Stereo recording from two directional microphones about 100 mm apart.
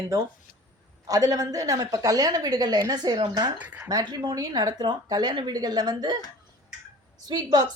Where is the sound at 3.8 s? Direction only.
40° right (ahead or behind).